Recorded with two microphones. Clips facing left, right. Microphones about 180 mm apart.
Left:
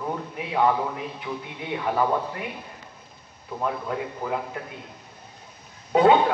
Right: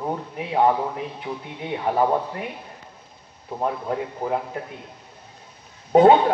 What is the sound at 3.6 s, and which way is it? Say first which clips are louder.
A man's voice: right 3 dB; 30° right (ahead or behind).